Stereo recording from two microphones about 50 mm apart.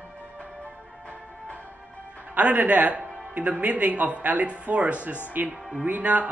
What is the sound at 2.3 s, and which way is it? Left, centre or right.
Speech, right.